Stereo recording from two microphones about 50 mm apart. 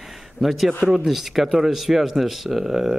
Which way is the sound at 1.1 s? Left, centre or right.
Centre.